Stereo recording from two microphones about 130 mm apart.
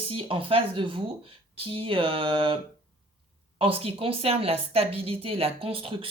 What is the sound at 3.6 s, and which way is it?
Speech, 45° right (ahead or behind).